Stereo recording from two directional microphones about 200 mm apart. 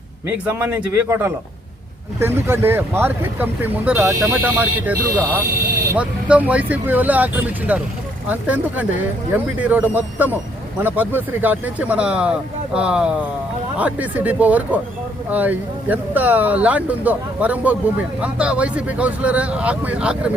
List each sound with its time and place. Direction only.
0.3 s speech: 10° right (ahead or behind)
5.5 s vehicle: 50° right (ahead or behind)
5.9 s speech: 5° right (ahead or behind)